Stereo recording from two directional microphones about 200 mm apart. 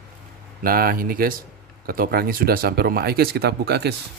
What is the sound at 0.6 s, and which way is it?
Speech, 45° right (ahead or behind).